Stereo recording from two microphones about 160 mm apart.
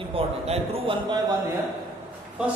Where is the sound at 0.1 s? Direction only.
35° right (ahead or behind).